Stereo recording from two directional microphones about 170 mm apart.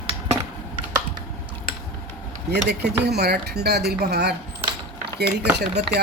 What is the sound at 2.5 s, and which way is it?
Speech, 75° right (ahead or behind).